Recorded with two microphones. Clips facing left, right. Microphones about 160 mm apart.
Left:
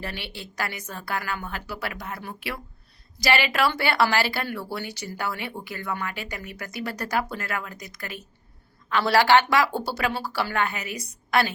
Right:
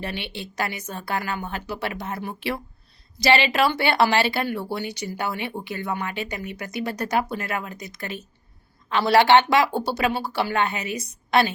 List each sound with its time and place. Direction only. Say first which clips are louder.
0.0 s speech: right 4 dB; 20° right (ahead or behind)